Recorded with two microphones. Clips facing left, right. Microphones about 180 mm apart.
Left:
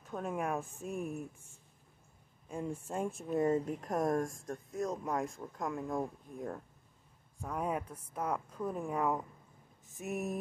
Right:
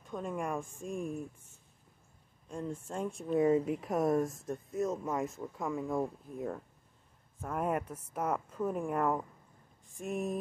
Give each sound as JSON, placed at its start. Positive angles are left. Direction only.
{"t": 0.0, "sound": "speech", "side_deg": 5}
{"t": 2.4, "sound": "speech", "side_deg": 5}